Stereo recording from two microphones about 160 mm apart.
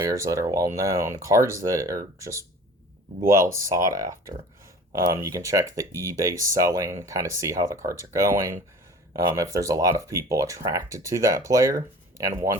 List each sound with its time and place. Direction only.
0.0 s speech: 20° right (ahead or behind)